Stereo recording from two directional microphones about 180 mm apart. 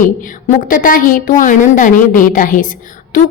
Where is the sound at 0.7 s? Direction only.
50° left (ahead or behind).